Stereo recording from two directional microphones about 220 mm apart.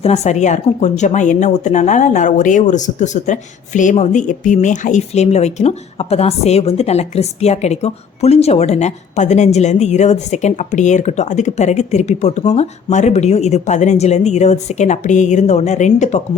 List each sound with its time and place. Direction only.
0.0 s speech: 30° left (ahead or behind)